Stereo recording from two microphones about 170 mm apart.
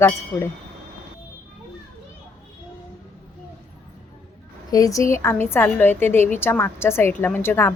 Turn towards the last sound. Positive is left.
turn(degrees=15)  # may be behind; listen again after turning